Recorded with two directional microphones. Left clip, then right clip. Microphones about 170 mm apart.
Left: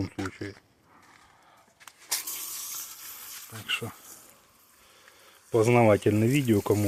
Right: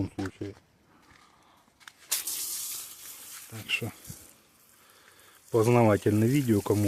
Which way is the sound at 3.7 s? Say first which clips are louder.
Even; 45° right (ahead or behind).